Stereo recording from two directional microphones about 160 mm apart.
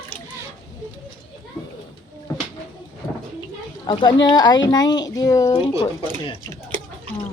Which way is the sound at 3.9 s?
30° left (ahead or behind).